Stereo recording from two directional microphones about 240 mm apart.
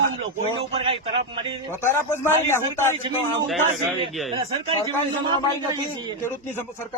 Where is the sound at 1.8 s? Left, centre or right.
Centre.